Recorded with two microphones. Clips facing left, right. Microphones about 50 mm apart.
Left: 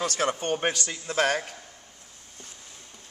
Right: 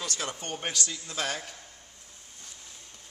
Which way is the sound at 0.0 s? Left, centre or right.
Left.